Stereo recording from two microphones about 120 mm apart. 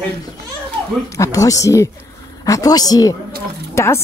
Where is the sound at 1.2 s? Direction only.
30° left (ahead or behind).